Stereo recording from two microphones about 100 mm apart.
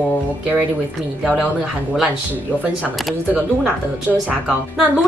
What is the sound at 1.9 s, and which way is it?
A woman's voice, 15° right (ahead or behind).